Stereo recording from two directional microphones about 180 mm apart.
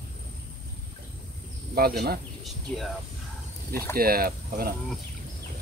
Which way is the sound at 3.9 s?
55° right (ahead or behind).